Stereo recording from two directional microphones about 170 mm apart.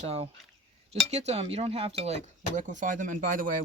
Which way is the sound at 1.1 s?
40° right (ahead or behind).